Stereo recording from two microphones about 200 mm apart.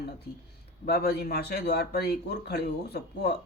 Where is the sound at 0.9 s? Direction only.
50° left (ahead or behind).